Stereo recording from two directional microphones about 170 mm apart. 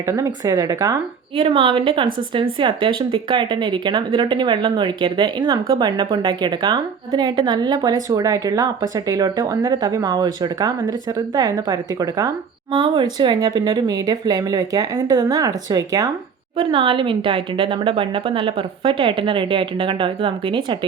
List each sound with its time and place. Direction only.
0.1 s speech: 20° right (ahead or behind)
1.4 s speech: 30° right (ahead or behind)